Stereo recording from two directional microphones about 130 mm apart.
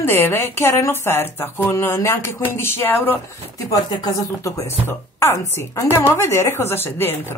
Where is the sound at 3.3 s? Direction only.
25° left (ahead or behind).